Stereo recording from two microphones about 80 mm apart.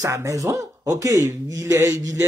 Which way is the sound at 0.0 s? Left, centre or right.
Right.